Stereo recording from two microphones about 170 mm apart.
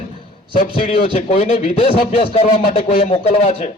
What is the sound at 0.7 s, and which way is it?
Speech, 55° left (ahead or behind).